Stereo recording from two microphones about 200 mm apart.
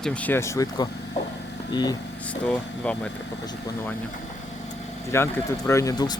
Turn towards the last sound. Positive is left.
turn(degrees=20)  # may be behind; listen again after turning